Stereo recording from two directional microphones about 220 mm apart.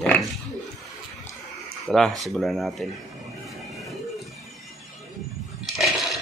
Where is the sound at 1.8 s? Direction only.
Centre (ahead or behind).